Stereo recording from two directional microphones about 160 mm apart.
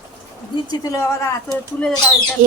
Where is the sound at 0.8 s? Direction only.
20° left (ahead or behind).